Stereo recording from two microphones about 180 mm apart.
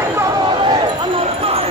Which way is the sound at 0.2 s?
25° right (ahead or behind).